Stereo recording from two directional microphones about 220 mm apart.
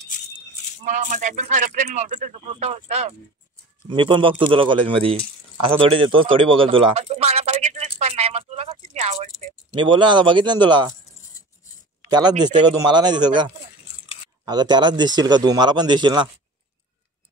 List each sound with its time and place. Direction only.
0.8 s speech: 35° right (ahead or behind)
5.6 s a sound: 25° right (ahead or behind)
12.1 s speech: 20° right (ahead or behind)